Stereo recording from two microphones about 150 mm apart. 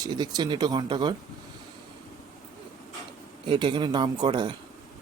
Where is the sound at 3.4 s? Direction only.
30° right (ahead or behind).